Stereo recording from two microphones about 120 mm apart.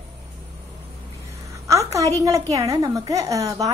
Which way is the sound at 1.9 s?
30° right (ahead or behind).